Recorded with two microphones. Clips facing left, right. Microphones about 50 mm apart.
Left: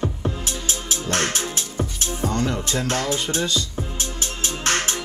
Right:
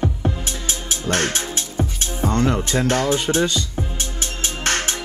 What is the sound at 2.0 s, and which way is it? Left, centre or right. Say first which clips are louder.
Speech: right 3 dB; right.